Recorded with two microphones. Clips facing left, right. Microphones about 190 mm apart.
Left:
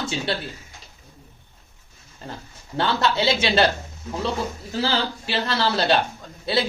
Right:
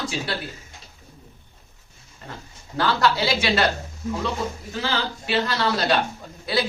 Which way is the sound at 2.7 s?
25° left (ahead or behind).